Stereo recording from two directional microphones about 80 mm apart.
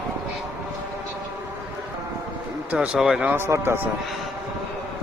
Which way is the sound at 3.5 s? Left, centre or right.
Right.